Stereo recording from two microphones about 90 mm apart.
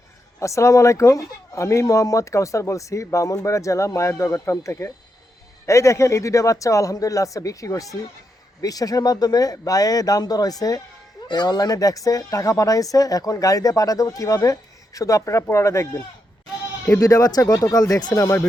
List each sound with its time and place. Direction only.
0.3 s speech: 35° left (ahead or behind)
17.0 s speech: 45° left (ahead or behind)
18.2 s speech: 30° left (ahead or behind)